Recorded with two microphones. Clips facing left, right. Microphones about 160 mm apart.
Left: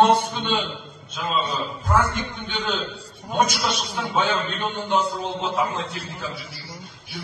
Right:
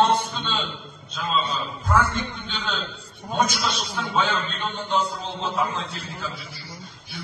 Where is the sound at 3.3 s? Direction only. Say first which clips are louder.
Left 2 dB; 15° left (ahead or behind).